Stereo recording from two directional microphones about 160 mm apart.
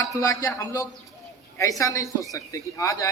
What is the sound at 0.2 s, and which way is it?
A man's voice, 20° left (ahead or behind).